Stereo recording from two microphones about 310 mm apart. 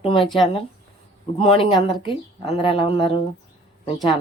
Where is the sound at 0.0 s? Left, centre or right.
Centre.